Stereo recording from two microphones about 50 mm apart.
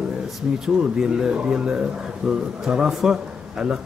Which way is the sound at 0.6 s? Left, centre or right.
Centre.